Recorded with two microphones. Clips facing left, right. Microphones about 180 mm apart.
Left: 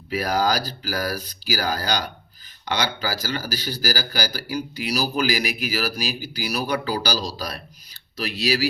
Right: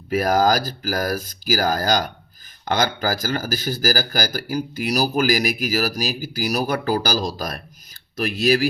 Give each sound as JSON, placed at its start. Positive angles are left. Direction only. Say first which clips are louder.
{"t": 0.1, "sound": "speech", "louder": "right 4 dB", "side_deg": -45}